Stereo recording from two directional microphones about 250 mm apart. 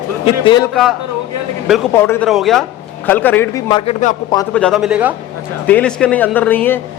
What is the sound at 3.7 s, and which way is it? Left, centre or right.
Speech, left.